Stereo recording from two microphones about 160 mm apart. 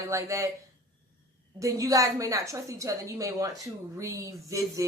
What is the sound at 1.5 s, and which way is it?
Speech, 20° right (ahead or behind).